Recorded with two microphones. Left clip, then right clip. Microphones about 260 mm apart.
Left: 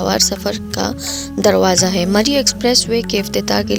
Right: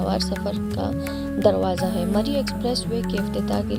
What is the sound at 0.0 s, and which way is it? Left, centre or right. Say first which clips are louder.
Speech: left 9 dB; left.